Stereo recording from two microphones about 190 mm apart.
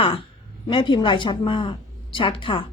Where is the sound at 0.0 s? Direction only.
30° left (ahead or behind).